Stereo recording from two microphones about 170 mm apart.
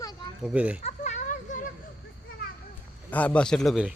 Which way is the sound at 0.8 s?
45° left (ahead or behind).